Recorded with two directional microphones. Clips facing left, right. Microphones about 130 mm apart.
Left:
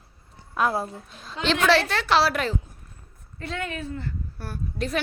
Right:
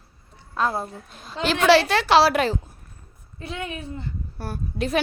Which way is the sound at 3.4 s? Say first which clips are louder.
Left 1 dB; 15° right (ahead or behind).